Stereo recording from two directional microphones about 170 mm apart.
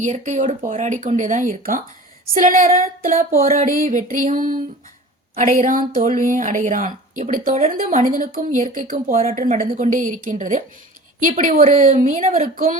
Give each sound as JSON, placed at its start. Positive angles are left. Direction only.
{"t": 0.0, "sound": "speech", "side_deg": -45}